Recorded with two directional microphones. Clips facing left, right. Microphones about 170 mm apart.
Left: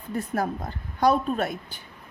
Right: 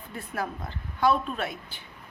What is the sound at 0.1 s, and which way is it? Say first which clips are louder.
A woman's voice: left 7 dB; 45° left (ahead or behind).